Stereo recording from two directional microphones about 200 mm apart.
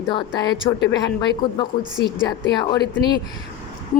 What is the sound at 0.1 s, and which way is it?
A woman's voice, 25° left (ahead or behind).